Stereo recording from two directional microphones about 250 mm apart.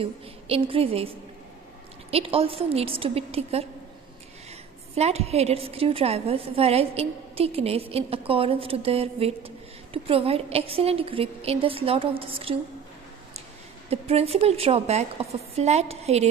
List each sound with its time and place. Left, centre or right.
0.0 s a woman's voice: right
4.9 s a woman's voice: right
13.8 s a woman's voice: right